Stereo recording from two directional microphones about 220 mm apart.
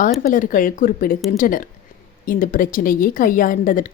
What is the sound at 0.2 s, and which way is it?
A woman's voice, 35° left (ahead or behind).